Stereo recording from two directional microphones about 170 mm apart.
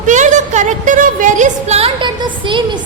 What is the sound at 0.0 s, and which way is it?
A woman's voice, 45° right (ahead or behind).